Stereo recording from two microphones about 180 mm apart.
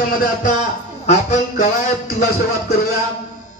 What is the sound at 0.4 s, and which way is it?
Music, 40° left (ahead or behind).